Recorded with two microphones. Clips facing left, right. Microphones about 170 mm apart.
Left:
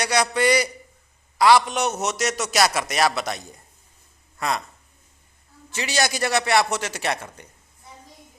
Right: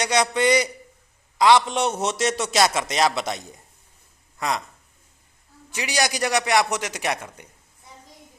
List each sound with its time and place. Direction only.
0.0 s a man's voice: 20° right (ahead or behind)
5.7 s a man's voice: 15° right (ahead or behind)